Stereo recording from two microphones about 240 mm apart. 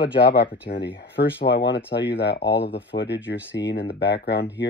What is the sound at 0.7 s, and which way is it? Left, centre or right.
Speech, left.